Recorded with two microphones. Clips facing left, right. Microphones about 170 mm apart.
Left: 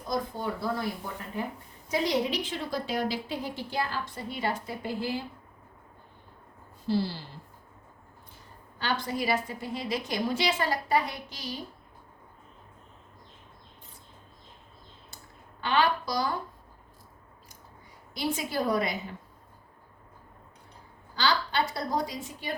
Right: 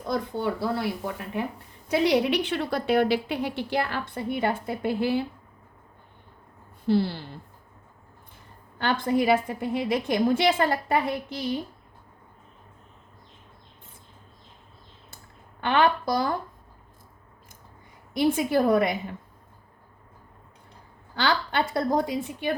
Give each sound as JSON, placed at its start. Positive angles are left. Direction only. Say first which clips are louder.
{"t": 0.1, "sound": "a woman's voice", "louder": "right 4 dB", "side_deg": -70}
{"t": 6.8, "sound": "a woman's voice", "louder": "right 5 dB", "side_deg": -60}
{"t": 8.8, "sound": "a woman's voice", "louder": "right 7 dB", "side_deg": -55}
{"t": 15.6, "sound": "a woman's voice", "louder": "right 4 dB", "side_deg": -55}
{"t": 18.1, "sound": "a woman's voice", "louder": "right 9 dB", "side_deg": -55}
{"t": 21.2, "sound": "a woman's voice", "louder": "right 2 dB", "side_deg": -55}